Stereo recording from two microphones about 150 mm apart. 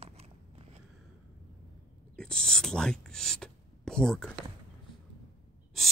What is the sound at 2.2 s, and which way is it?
Speech, 5° left (ahead or behind).